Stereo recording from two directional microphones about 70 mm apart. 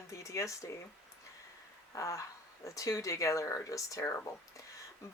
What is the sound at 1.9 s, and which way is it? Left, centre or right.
Speech, left.